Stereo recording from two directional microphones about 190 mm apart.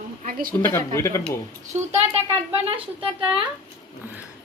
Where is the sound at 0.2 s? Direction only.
45° right (ahead or behind).